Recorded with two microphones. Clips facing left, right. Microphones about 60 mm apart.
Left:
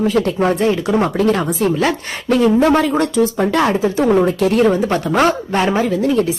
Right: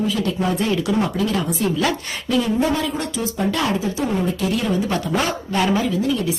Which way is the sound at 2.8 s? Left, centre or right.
Left.